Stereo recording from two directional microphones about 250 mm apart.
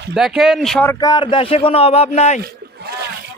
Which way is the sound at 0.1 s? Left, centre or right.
Centre.